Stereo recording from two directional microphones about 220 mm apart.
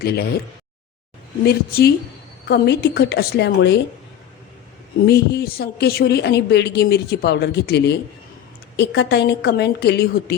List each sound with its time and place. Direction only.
1.5 s speech: 45° left (ahead or behind)
5.0 s speech: 50° left (ahead or behind)